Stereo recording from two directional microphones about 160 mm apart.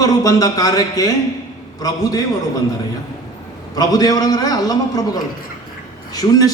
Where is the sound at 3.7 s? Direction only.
25° left (ahead or behind).